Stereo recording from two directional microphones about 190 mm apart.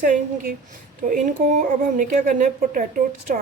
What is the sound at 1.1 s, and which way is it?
A woman's voice, 45° right (ahead or behind).